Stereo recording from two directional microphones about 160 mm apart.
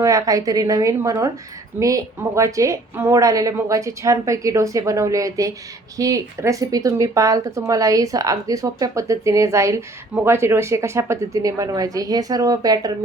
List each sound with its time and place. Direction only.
0.0 s speech: 20° right (ahead or behind)